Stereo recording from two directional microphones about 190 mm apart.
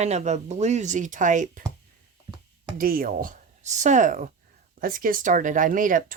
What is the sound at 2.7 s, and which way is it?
Speech, 50° right (ahead or behind).